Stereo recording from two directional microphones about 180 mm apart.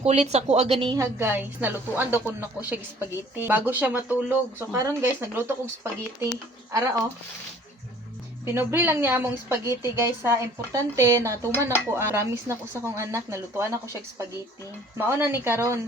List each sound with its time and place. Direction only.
0.0 s speech: 35° right (ahead or behind)
0.9 s a woman's voice: 15° right (ahead or behind)
8.5 s a woman's voice: 10° right (ahead or behind)